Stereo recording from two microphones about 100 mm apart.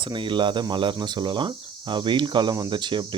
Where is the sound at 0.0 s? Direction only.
55° right (ahead or behind).